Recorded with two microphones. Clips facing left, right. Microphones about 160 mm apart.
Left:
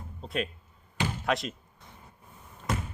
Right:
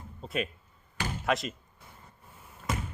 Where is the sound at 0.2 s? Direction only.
Centre (ahead or behind).